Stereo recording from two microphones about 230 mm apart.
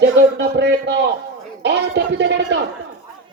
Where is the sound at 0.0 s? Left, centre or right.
Right.